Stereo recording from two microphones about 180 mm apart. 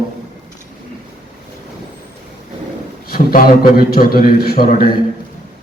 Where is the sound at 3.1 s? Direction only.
55° left (ahead or behind).